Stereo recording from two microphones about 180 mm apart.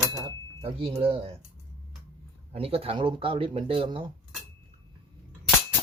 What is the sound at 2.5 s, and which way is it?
Speech, 30° right (ahead or behind).